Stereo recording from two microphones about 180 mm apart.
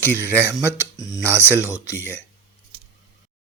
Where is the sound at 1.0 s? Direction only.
20° left (ahead or behind).